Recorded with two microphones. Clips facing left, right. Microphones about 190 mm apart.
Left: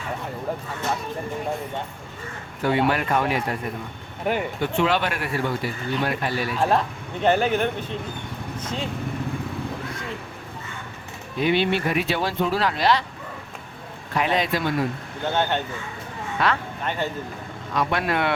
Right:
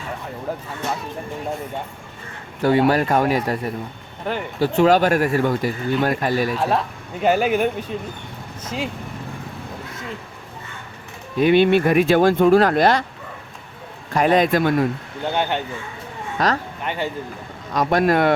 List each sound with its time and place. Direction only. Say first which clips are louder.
2.6 s speech: right 5 dB; 40° right (ahead or behind)
4.3 s speech: left 1 dB; 15° left (ahead or behind)
4.6 s speech: right 9 dB; 40° right (ahead or behind)
6.6 s speech: even; 5° right (ahead or behind)
11.3 s speech: right 7 dB; 50° right (ahead or behind)
14.1 s speech: right 7 dB; 45° right (ahead or behind)
15.3 s speech: right 1 dB; 15° right (ahead or behind)
16.4 s speech: right 3 dB; 40° right (ahead or behind)
16.8 s speech: even; 15° right (ahead or behind)
17.7 s speech: right 6 dB; 40° right (ahead or behind)